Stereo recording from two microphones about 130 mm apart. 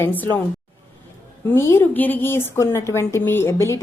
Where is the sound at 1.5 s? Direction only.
20° left (ahead or behind).